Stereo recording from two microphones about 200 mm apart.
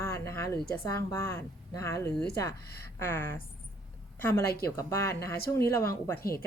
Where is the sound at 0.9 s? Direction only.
15° left (ahead or behind).